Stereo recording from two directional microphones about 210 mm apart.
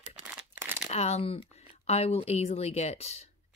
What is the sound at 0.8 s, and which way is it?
Speech, 30° left (ahead or behind).